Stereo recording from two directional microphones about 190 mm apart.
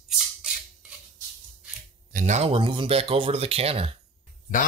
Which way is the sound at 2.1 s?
40° right (ahead or behind).